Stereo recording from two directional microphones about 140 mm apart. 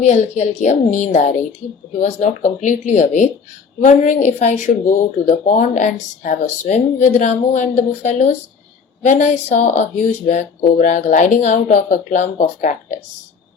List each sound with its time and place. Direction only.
0.1 s speech: 55° left (ahead or behind)